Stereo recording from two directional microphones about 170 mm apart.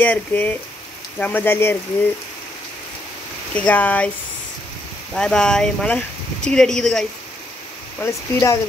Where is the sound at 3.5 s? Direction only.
10° left (ahead or behind).